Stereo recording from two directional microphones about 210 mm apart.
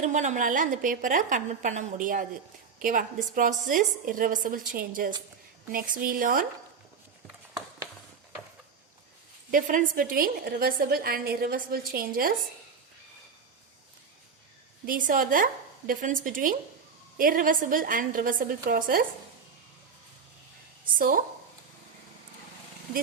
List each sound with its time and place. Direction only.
0.0 s a woman's voice: 35° right (ahead or behind)
9.5 s a woman's voice: 40° right (ahead or behind)
14.8 s a woman's voice: 40° right (ahead or behind)